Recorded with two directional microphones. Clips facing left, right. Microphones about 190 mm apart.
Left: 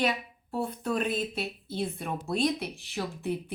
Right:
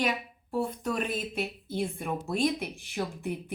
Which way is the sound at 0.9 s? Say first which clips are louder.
Left 2 dB; 10° right (ahead or behind).